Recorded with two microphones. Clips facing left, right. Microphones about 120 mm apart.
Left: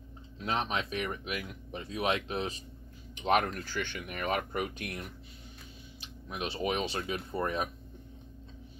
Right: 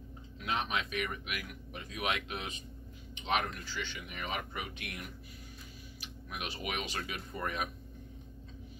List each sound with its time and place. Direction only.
0.4 s speech: 35° left (ahead or behind)
5.9 s speech: 30° left (ahead or behind)